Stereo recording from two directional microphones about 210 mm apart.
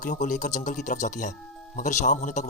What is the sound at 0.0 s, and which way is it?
Speech, 40° left (ahead or behind).